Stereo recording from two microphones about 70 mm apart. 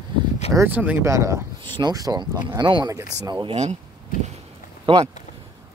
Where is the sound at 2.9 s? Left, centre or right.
Right.